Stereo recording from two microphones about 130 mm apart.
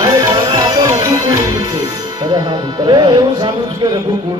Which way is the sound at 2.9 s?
35° right (ahead or behind).